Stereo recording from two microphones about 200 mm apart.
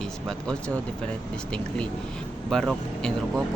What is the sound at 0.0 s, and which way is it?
Speech, 5° left (ahead or behind).